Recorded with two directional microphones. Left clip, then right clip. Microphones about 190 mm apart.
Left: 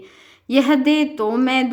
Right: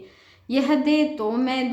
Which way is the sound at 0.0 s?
35° left (ahead or behind).